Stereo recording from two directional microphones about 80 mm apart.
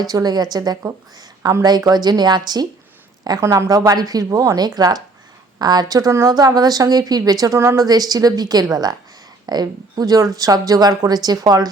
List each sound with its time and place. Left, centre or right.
0.0 s a woman's voice: right
1.4 s a woman's voice: right
1.6 s speech: right
3.4 s a woman's voice: right
3.7 s a woman's voice: right
6.3 s a woman's voice: right
7.9 s a woman's voice: right